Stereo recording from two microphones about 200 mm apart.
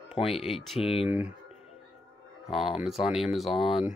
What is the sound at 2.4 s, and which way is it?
Speech, centre (ahead or behind).